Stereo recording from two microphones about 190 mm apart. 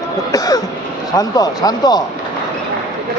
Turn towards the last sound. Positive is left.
turn(degrees=20)  # may be behind; listen again after turning